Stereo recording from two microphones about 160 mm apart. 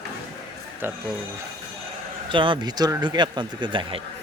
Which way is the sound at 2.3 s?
30° right (ahead or behind).